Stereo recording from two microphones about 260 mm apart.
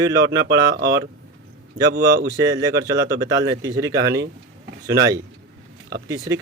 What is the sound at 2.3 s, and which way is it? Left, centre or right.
Speech, centre.